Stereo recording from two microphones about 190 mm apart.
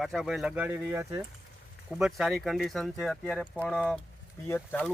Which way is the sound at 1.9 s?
5° right (ahead or behind).